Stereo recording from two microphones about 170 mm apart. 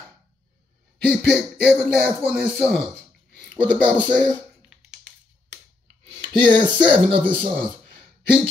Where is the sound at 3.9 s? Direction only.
10° left (ahead or behind).